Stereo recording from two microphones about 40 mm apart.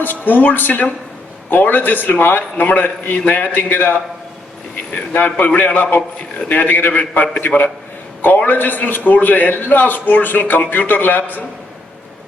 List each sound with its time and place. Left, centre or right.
0.0 s a man's voice: left
5.2 s a man's voice: left